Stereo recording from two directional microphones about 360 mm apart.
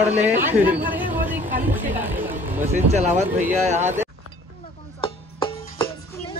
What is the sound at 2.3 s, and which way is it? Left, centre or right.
Speech, centre.